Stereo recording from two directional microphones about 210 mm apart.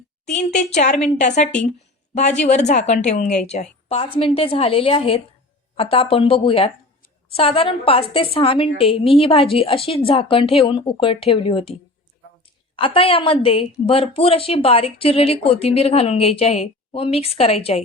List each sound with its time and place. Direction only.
0.5 s a woman's voice: 35° left (ahead or behind)
2.5 s a woman's voice: 35° left (ahead or behind)